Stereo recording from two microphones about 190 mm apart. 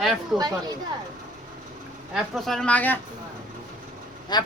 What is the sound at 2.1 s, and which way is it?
Speech, centre (ahead or behind).